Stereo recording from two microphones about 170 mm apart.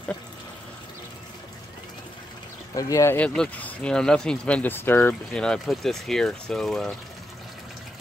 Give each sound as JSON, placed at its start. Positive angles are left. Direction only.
{"t": 2.7, "sound": "speech", "side_deg": 20}